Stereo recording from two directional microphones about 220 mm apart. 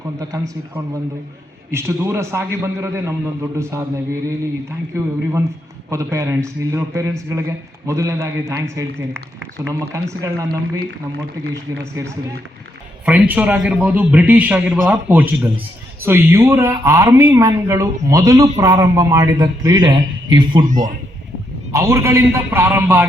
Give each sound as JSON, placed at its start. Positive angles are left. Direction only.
{"t": 0.2, "sound": "a man's voice", "side_deg": -15}
{"t": 1.7, "sound": "a man's voice", "side_deg": -15}
{"t": 5.9, "sound": "a man's voice", "side_deg": -15}
{"t": 10.8, "sound": "speech", "side_deg": -45}
{"t": 11.8, "sound": "a man's voice", "side_deg": -15}
{"t": 20.7, "sound": "a man's voice", "side_deg": -35}
{"t": 21.7, "sound": "a man's voice", "side_deg": -15}